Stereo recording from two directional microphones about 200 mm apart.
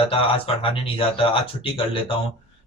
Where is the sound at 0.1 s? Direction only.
25° left (ahead or behind).